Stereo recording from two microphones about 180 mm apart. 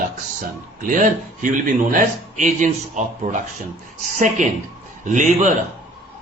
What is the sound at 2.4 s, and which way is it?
A man's voice, 45° right (ahead or behind).